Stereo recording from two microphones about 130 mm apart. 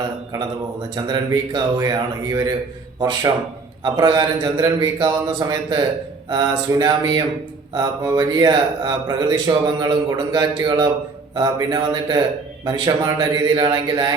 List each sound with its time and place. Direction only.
0.9 s speech: 30° right (ahead or behind)